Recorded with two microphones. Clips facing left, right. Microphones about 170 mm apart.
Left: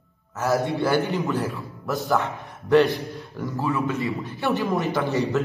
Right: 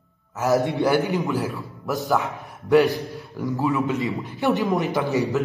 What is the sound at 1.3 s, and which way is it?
Speech, centre (ahead or behind).